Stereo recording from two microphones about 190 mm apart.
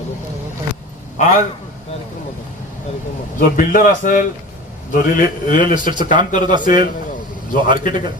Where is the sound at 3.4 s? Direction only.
45° left (ahead or behind).